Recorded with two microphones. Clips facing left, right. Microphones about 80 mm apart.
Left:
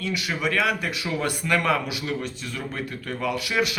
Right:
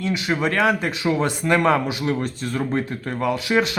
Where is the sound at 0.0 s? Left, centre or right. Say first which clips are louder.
Right 5 dB; right.